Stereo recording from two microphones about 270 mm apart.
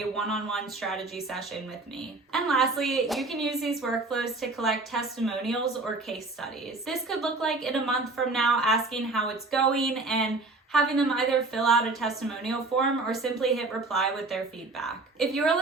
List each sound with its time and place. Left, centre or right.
0.2 s a woman's voice: centre